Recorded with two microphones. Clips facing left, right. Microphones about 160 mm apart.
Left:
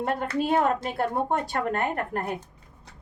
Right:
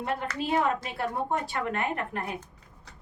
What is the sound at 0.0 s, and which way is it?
A woman's voice, 50° left (ahead or behind).